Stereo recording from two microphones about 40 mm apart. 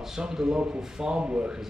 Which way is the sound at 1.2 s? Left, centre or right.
Right.